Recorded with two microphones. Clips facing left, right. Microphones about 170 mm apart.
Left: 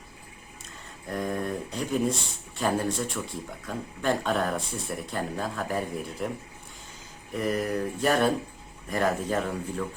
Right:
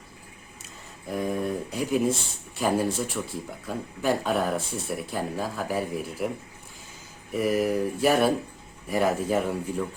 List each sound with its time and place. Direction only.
1.0 s speech: 5° right (ahead or behind)
7.3 s speech: 5° right (ahead or behind)